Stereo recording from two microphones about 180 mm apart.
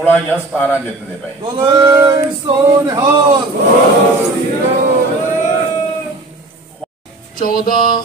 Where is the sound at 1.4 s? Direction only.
25° right (ahead or behind).